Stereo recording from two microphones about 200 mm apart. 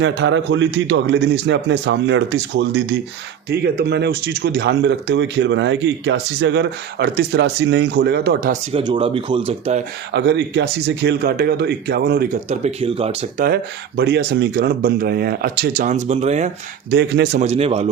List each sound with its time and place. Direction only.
0.0 s speech: 65° right (ahead or behind)
8.7 s a man's voice: 25° right (ahead or behind)
10.1 s speech: 60° right (ahead or behind)
12.5 s speech: 30° right (ahead or behind)
13.4 s speech: 50° right (ahead or behind); by 16.5 s 35° right (ahead or behind)
16.9 s speech: 55° right (ahead or behind)
17.4 s a man's voice: 30° right (ahead or behind)